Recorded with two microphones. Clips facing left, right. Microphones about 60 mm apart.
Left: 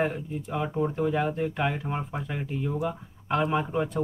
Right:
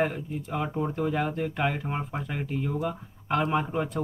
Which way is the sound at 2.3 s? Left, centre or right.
Right.